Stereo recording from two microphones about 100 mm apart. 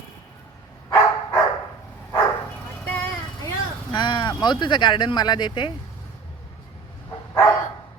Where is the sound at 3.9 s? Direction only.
50° left (ahead or behind).